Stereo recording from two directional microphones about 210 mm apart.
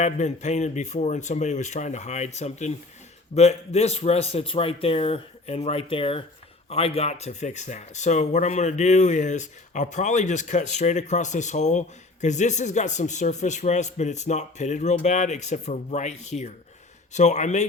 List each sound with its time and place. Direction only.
0.0 s speech: 35° left (ahead or behind)